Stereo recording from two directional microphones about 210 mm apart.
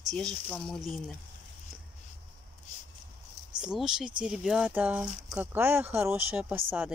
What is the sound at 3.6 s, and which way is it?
Speech, 5° right (ahead or behind).